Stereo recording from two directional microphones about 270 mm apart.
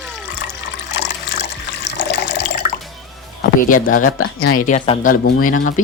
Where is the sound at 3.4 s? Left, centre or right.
Left.